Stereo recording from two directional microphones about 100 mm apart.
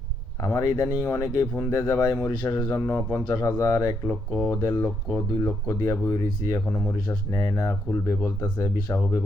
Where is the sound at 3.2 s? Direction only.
35° left (ahead or behind).